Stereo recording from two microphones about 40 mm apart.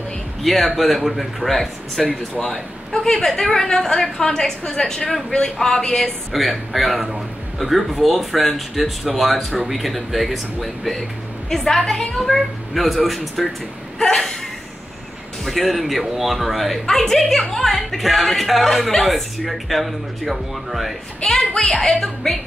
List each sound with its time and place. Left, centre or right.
0.4 s a man's voice: centre
6.3 s a man's voice: centre
13.9 s a woman's voice: centre
15.4 s a man's voice: centre
16.8 s a man's voice: centre
21.2 s a woman's voice: centre